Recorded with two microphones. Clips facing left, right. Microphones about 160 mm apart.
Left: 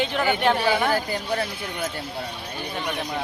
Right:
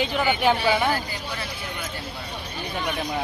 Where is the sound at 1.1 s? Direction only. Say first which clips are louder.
Left 7 dB; 50° left (ahead or behind).